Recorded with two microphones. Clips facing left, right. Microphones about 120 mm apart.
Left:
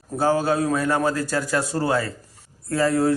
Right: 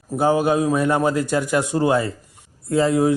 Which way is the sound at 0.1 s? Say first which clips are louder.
Right 3 dB; 15° right (ahead or behind).